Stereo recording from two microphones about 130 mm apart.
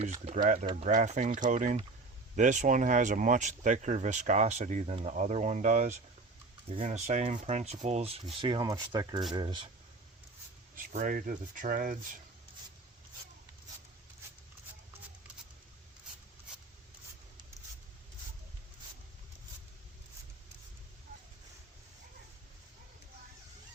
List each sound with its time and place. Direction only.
0.0 s speech: 55° right (ahead or behind)
0.4 s speech: 75° right (ahead or behind); by 8.6 s 40° right (ahead or behind)
8.6 s speech: 25° right (ahead or behind)
10.8 s speech: 90° right